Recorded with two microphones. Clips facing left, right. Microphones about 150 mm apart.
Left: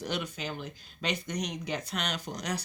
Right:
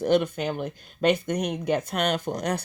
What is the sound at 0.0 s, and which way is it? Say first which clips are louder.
Speech: right 12 dB; 50° right (ahead or behind).